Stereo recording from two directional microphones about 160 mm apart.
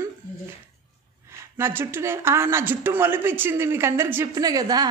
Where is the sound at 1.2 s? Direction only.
15° right (ahead or behind).